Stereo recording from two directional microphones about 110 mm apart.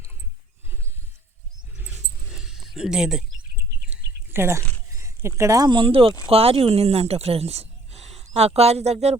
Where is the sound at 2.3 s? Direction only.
5° right (ahead or behind).